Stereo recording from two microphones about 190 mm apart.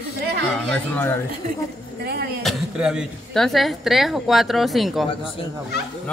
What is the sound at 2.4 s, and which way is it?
A woman's voice, centre (ahead or behind).